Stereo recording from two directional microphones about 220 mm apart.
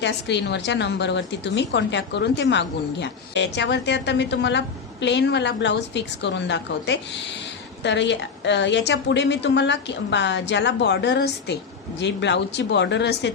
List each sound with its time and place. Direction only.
0.0 s a woman's voice: 50° left (ahead or behind)